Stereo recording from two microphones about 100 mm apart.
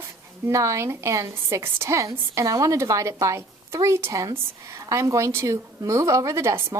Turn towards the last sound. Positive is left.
turn(degrees=-30)  # may be behind; listen again after turning